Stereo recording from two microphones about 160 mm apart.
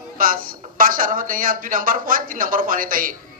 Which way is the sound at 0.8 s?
60° right (ahead or behind).